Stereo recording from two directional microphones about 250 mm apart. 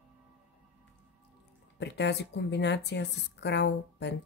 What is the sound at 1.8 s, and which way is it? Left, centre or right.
Speech, left.